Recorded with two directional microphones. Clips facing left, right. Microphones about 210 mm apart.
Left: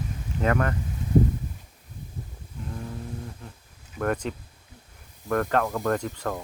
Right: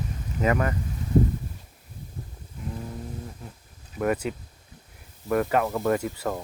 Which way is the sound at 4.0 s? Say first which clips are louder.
Right 2 dB; 10° right (ahead or behind).